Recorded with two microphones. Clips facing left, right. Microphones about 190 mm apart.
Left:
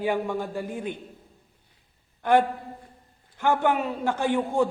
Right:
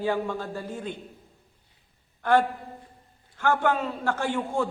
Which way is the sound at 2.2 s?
15° left (ahead or behind).